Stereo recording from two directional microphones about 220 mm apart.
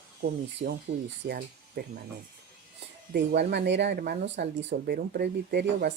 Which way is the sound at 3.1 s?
50° right (ahead or behind).